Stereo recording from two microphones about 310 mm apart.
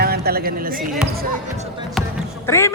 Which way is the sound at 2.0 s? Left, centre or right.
Centre.